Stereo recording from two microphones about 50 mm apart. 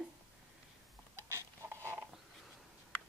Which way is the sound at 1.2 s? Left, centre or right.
Right.